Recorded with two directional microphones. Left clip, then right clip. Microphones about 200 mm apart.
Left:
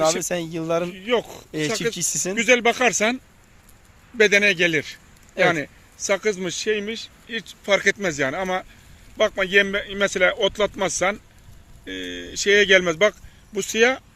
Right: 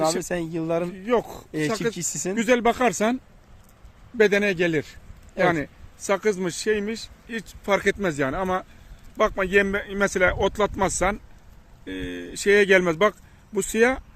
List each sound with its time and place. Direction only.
0.2 s speech: centre (ahead or behind)
0.9 s speech: 40° right (ahead or behind)
2.0 s speech: centre (ahead or behind)
2.3 s speech: 35° right (ahead or behind)
4.2 s speech: 35° right (ahead or behind)